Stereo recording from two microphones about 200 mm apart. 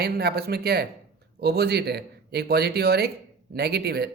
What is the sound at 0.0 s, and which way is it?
Speech, 55° right (ahead or behind).